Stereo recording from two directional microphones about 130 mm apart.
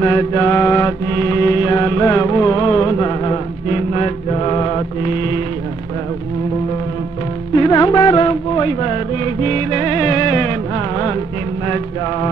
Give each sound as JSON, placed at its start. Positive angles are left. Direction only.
{"t": 0.0, "sound": "mantra", "side_deg": 25}
{"t": 3.6, "sound": "mantra", "side_deg": 55}
{"t": 7.5, "sound": "music", "side_deg": 30}
{"t": 11.6, "sound": "mantra", "side_deg": 30}